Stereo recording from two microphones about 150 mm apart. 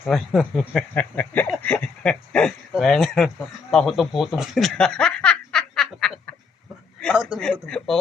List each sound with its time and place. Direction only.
0.1 s a man's voice: centre (ahead or behind)